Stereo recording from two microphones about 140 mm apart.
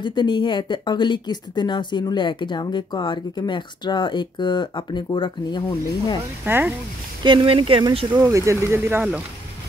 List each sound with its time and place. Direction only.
0.0 s speech: 35° left (ahead or behind)
6.4 s speech: 15° right (ahead or behind)
7.2 s speech: 40° right (ahead or behind)
8.2 s speech: 20° right (ahead or behind)